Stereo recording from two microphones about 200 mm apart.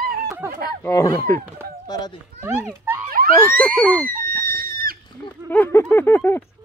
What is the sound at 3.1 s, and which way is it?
Police car, 45° right (ahead or behind).